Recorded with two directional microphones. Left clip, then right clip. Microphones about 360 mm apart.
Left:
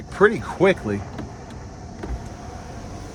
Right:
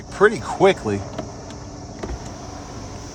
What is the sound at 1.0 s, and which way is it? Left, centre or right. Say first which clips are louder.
Vehicle: right 4 dB; right.